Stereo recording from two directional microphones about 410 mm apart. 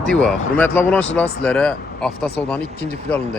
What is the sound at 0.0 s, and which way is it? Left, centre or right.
Speech, centre.